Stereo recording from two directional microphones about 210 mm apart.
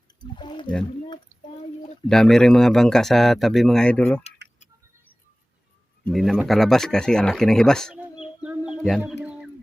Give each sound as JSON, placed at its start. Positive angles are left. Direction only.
{"t": 0.2, "sound": "speech", "side_deg": 20}
{"t": 1.3, "sound": "speech", "side_deg": -10}
{"t": 2.0, "sound": "speech", "side_deg": 0}
{"t": 4.4, "sound": "a sound", "side_deg": -55}
{"t": 6.1, "sound": "speech", "side_deg": 0}